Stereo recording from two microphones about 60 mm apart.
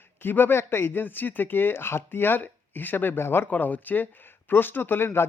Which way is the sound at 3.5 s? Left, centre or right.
Left.